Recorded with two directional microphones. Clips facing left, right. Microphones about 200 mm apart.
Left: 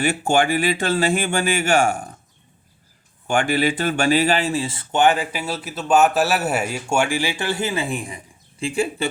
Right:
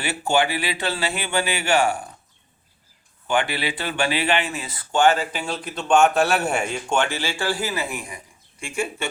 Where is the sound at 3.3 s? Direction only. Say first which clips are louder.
Left 4 dB; 45° left (ahead or behind).